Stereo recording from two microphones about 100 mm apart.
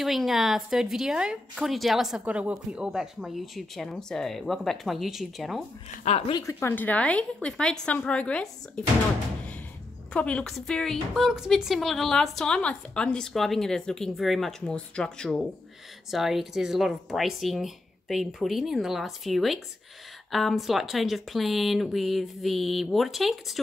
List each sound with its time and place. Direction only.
0.0 s speech: centre (ahead or behind)
2.2 s speech: 15° right (ahead or behind)
6.0 s speech: 90° left
6.3 s speech: 35° left (ahead or behind)
6.7 s speech: 15° left (ahead or behind)
10.1 s speech: 10° left (ahead or behind)